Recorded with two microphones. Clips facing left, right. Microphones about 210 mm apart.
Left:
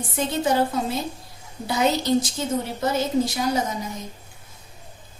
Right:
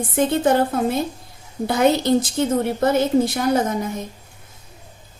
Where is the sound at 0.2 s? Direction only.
55° right (ahead or behind).